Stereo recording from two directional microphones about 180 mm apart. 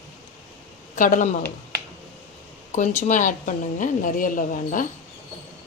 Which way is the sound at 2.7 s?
40° left (ahead or behind).